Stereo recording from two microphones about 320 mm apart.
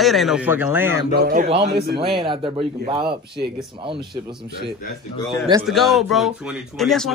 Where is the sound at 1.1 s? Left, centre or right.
Right.